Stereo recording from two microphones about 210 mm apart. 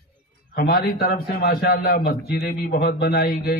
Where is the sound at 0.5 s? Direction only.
45° left (ahead or behind).